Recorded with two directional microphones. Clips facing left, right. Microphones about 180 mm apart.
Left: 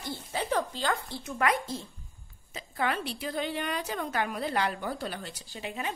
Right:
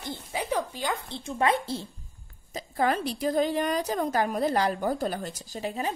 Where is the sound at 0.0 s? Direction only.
15° right (ahead or behind).